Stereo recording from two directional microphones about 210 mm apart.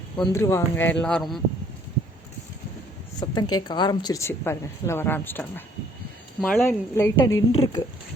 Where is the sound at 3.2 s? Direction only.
20° left (ahead or behind).